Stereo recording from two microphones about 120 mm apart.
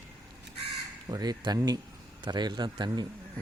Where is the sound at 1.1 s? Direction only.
35° right (ahead or behind).